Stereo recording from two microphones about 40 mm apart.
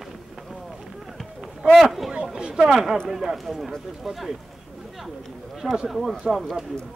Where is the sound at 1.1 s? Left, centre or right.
Centre.